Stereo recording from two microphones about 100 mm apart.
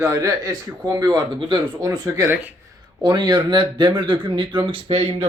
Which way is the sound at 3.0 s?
50° right (ahead or behind).